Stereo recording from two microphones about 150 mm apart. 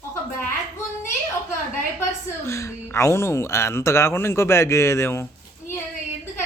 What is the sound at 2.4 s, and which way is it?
Speech, 20° left (ahead or behind).